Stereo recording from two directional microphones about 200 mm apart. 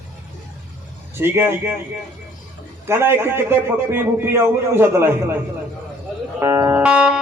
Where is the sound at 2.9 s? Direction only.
10° right (ahead or behind).